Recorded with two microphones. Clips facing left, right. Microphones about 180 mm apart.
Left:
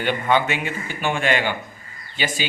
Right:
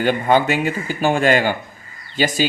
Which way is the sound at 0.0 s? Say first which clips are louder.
Right 4 dB; 40° right (ahead or behind).